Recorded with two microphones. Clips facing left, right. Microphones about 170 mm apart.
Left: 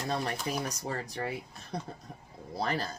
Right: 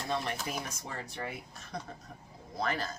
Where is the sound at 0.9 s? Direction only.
35° left (ahead or behind).